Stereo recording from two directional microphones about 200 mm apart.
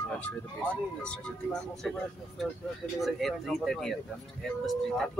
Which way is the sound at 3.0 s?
Centre (ahead or behind).